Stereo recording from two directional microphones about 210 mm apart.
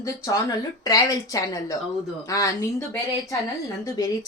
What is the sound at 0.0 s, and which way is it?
A woman's voice, 15° left (ahead or behind).